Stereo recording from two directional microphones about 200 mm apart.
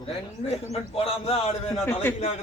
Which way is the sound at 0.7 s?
30° left (ahead or behind).